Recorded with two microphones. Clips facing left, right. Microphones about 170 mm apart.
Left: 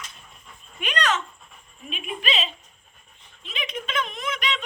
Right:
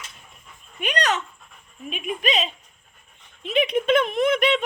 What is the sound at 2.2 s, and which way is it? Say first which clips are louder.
Speech: right 4 dB; 45° right (ahead or behind).